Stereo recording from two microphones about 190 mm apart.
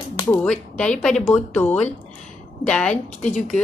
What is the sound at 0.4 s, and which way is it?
A woman's voice, 5° left (ahead or behind).